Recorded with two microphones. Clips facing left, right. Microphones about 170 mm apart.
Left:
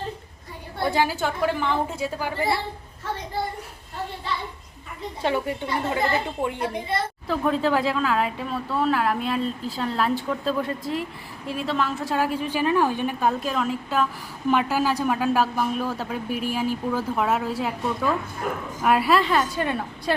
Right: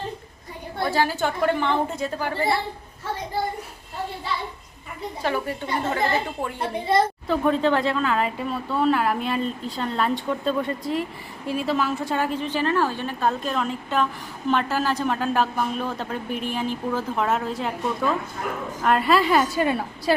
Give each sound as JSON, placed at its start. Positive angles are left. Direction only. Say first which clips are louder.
{"t": 0.9, "sound": "speech", "louder": "even", "side_deg": 15}
{"t": 5.2, "sound": "a woman's voice", "louder": "left 2 dB", "side_deg": 20}
{"t": 6.6, "sound": "a woman's voice", "louder": "right 5 dB", "side_deg": -35}
{"t": 7.3, "sound": "speech", "louder": "left 3 dB", "side_deg": 0}
{"t": 19.2, "sound": "a woman's voice", "louder": "right 3 dB", "side_deg": -10}